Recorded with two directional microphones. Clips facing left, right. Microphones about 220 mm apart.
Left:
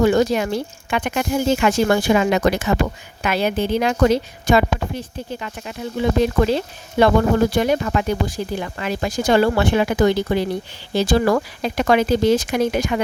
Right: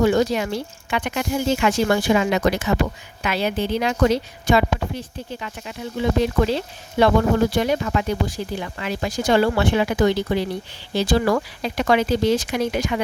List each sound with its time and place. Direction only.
0.0 s speech: 50° left (ahead or behind)